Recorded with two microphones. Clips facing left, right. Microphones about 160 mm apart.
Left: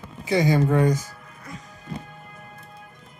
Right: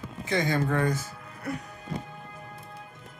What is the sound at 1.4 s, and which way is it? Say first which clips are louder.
Music: right 8 dB; 65° right (ahead or behind).